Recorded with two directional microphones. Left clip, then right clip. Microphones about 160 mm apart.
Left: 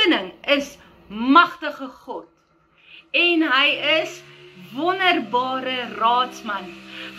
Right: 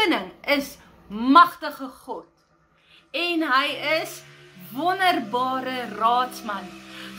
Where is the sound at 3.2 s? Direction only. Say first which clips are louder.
Left 5 dB; 45° right (ahead or behind).